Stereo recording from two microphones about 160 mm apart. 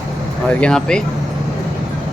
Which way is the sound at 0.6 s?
5° left (ahead or behind).